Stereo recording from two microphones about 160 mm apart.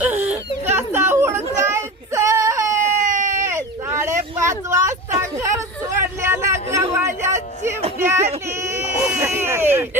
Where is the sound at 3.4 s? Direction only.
15° right (ahead or behind).